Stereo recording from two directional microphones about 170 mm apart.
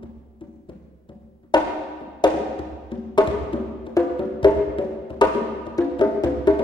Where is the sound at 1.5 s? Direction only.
25° left (ahead or behind).